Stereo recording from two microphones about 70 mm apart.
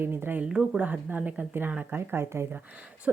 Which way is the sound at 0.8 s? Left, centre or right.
Right.